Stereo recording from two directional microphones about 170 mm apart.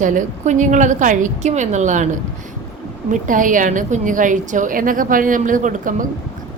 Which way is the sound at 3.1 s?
50° right (ahead or behind).